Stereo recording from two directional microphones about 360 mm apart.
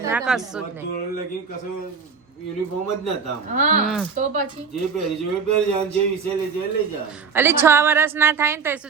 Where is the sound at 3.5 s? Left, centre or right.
Right.